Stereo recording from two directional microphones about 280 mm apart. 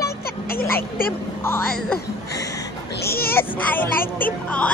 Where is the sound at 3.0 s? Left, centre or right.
Left.